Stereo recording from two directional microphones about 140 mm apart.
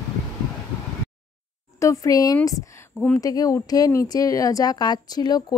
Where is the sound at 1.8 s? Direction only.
25° left (ahead or behind).